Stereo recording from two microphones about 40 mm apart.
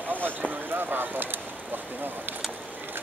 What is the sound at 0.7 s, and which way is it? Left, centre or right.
Speech, right.